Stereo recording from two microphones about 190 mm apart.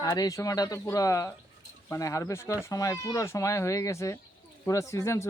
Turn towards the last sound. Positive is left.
turn(degrees=15)  # may be behind; listen again after turning